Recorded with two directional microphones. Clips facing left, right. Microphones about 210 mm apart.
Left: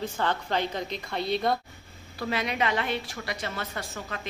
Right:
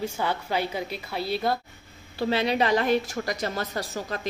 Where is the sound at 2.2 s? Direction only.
30° right (ahead or behind).